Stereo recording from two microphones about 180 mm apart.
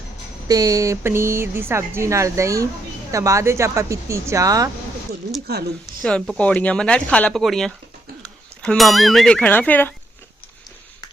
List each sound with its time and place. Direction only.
0.4 s speech: 20° right (ahead or behind)
5.8 s speech: centre (ahead or behind)